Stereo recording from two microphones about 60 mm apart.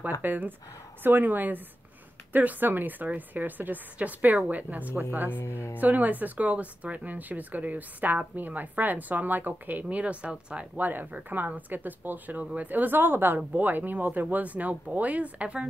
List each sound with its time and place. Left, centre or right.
0.2 s a woman's voice: right
5.4 s speech: left
5.8 s a woman's voice: right
10.8 s a woman's voice: right